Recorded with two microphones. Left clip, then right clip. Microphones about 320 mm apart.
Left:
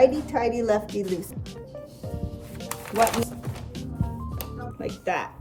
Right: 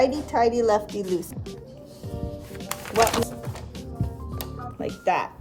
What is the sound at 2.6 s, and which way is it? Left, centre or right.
Music, right.